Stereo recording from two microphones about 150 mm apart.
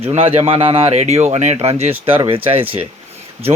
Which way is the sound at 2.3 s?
40° right (ahead or behind).